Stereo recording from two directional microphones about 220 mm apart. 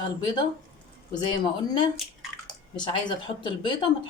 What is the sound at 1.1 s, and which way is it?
Speech, 20° left (ahead or behind).